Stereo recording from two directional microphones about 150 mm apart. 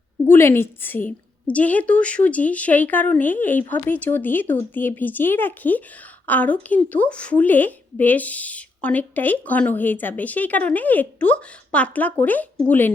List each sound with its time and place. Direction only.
0.3 s a woman's voice: 15° left (ahead or behind)